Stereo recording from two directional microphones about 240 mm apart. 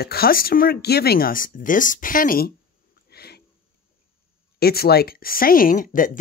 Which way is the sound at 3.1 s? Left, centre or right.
Left.